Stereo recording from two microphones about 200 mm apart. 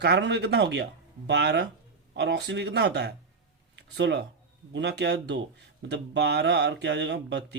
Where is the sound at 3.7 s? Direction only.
60° right (ahead or behind).